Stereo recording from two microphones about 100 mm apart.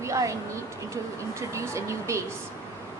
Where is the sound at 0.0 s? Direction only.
30° right (ahead or behind).